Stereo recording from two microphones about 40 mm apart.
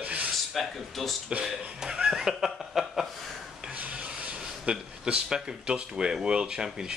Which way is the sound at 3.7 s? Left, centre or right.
Right.